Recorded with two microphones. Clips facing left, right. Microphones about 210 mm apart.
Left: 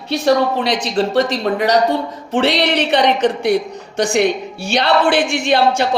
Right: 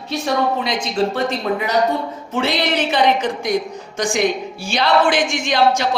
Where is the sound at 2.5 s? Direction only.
70° left (ahead or behind).